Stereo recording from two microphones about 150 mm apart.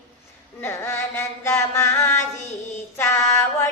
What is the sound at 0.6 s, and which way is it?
Music, 15° left (ahead or behind).